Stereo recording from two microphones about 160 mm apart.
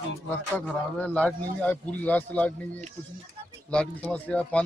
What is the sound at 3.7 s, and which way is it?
Speech, 5° left (ahead or behind).